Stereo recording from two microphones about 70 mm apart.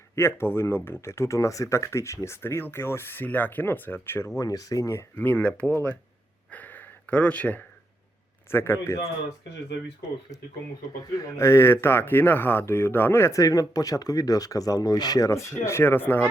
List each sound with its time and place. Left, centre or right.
0.2 s speech: left
4.4 s speech: left
5.1 s speech: left
6.5 s gasp: left
8.4 s speech: left
11.0 s speech: left
13.3 s speech: left
15.3 s speech: left